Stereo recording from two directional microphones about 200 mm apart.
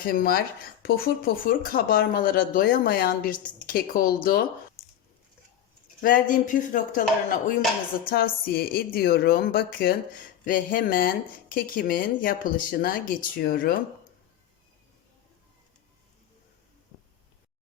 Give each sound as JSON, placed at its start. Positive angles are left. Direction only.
{"t": 0.0, "sound": "speech", "side_deg": 45}
{"t": 6.0, "sound": "speech", "side_deg": 45}